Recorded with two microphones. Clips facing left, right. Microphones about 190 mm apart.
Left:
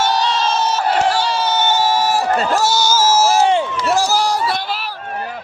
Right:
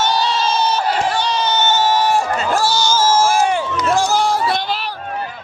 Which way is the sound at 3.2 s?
25° left (ahead or behind).